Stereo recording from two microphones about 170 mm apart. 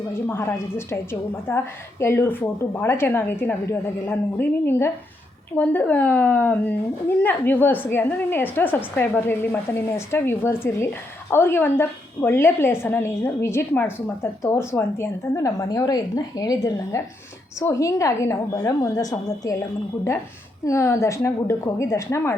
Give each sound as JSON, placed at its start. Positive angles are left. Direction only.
{"t": 0.3, "sound": "a woman's voice", "side_deg": 15}
{"t": 20.7, "sound": "a woman's voice", "side_deg": 15}